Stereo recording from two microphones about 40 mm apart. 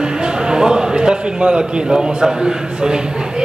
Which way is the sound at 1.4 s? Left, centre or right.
Right.